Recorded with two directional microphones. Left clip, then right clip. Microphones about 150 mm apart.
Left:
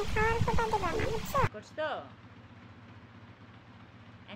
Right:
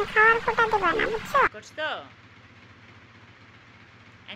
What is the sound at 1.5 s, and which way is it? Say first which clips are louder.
Speech: right 4 dB; centre (ahead or behind).